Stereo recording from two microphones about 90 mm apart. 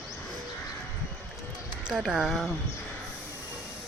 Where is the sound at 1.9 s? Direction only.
5° right (ahead or behind).